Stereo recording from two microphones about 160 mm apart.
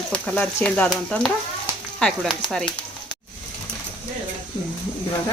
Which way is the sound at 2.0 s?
5° left (ahead or behind).